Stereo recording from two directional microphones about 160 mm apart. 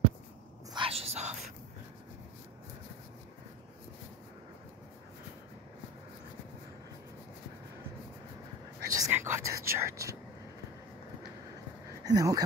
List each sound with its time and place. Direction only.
0.7 s whispering: 35° right (ahead or behind)
8.9 s speech: 20° right (ahead or behind)
12.0 s speech: 20° right (ahead or behind)